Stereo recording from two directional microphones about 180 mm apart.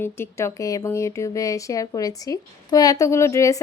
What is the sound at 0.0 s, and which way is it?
Speech, 15° left (ahead or behind).